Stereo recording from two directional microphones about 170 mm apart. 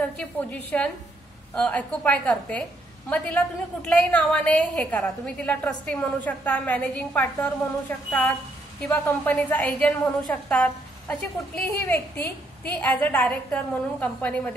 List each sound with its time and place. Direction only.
0.0 s a woman's voice: 5° left (ahead or behind)
8.8 s a woman's voice: 10° left (ahead or behind)